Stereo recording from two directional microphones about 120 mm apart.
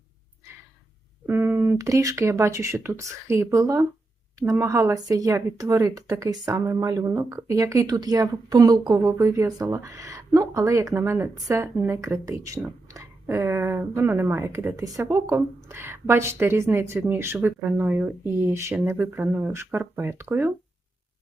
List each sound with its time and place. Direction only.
1.3 s speech: 20° right (ahead or behind)